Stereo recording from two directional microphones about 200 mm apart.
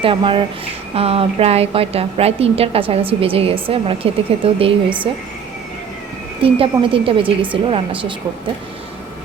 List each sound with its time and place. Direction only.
0.0 s a woman's voice: 25° right (ahead or behind)
6.4 s a woman's voice: 25° right (ahead or behind)